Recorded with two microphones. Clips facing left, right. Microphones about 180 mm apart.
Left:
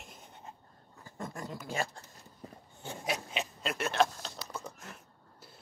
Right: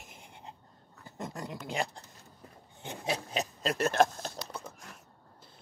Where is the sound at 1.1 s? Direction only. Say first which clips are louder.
Right 1 dB; 20° right (ahead or behind).